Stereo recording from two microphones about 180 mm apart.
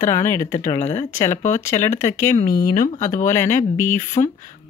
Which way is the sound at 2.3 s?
50° left (ahead or behind).